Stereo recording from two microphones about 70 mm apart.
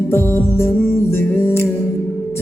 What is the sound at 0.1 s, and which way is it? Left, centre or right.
Music, left.